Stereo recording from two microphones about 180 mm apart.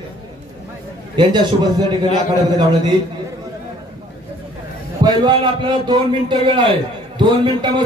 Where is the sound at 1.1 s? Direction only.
25° right (ahead or behind).